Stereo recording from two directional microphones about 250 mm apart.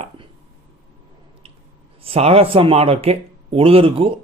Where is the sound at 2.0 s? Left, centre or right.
Right.